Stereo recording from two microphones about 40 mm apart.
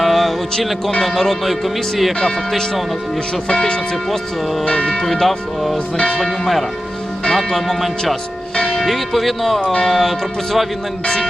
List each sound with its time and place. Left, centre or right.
0.0 s music: centre
1.0 s speech: centre
2.2 s speech: centre
4.6 s speech: left
4.9 s speech: centre